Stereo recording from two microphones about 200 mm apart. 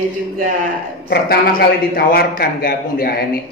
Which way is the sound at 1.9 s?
50° left (ahead or behind).